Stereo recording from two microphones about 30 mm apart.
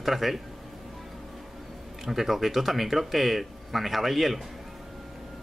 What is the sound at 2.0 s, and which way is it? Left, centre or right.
Speech, centre.